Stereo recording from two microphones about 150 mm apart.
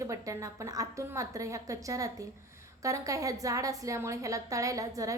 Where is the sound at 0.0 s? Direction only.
20° right (ahead or behind).